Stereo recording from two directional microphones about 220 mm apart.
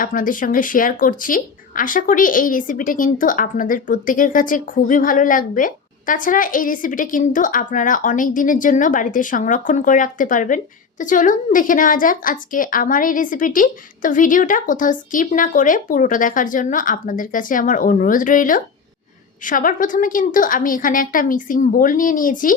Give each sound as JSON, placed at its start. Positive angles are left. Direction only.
{"t": 0.0, "sound": "speech", "side_deg": 40}